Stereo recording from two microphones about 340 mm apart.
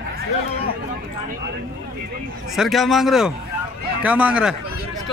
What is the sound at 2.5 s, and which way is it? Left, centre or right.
Speech, centre.